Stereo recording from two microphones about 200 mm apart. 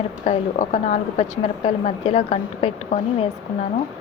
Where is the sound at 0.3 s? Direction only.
35° left (ahead or behind).